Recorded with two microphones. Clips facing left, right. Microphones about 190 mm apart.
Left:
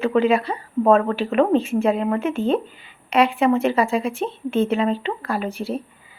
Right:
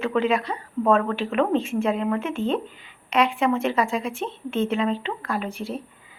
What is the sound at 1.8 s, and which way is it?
Speech, 35° left (ahead or behind).